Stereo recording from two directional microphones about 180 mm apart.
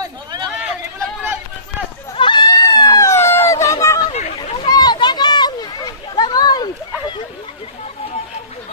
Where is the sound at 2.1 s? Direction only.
25° left (ahead or behind).